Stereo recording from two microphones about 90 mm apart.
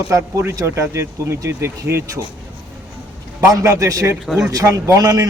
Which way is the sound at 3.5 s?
40° right (ahead or behind).